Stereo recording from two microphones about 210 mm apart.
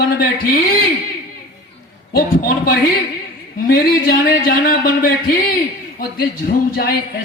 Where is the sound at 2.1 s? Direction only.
40° left (ahead or behind).